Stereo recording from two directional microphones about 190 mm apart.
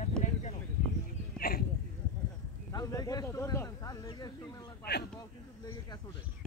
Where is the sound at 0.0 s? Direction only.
35° left (ahead or behind).